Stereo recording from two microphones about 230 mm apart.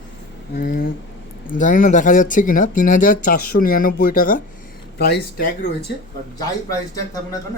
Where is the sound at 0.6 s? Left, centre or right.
Left.